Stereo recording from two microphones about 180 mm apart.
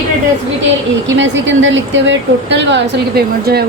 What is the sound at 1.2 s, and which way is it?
Speech, 90° right.